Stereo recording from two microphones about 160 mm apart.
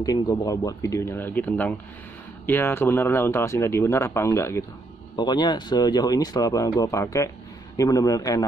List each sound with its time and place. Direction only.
0.0 s speech: 25° left (ahead or behind)